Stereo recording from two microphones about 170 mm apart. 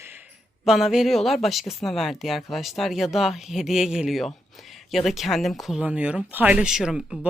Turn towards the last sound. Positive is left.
turn(degrees=-5)  # may be behind; listen again after turning